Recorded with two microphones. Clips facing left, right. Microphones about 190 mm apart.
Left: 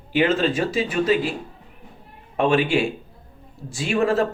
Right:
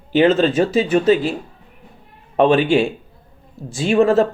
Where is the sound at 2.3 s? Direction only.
35° right (ahead or behind).